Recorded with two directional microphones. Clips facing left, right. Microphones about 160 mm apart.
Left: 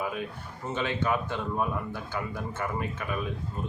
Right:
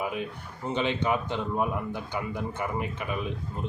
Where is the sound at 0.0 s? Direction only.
20° right (ahead or behind).